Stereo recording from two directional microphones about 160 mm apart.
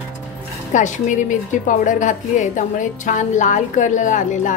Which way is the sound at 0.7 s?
50° left (ahead or behind).